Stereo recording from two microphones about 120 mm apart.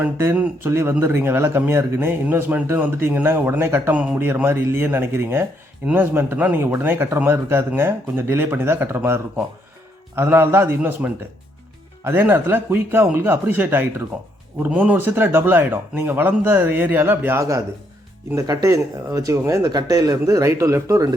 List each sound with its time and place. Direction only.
0.0 s speech: 20° right (ahead or behind)